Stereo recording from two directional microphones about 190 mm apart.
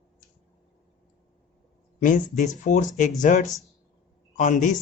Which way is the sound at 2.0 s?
40° left (ahead or behind).